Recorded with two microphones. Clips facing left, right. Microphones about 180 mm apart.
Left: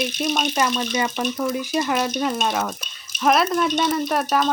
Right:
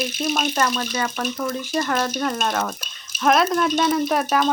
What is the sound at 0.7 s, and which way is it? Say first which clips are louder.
Speech: left 2 dB; 15° left (ahead or behind).